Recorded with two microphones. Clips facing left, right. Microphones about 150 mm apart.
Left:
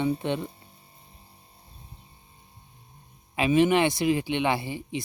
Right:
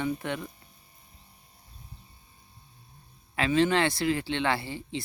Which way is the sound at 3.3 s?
15° left (ahead or behind).